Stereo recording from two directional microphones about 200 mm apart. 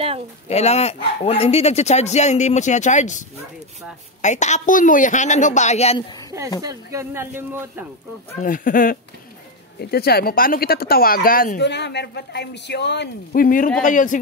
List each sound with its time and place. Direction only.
0.5 s speech: 30° left (ahead or behind)
6.6 s speech: 15° right (ahead or behind)
8.4 s speech: 45° left (ahead or behind)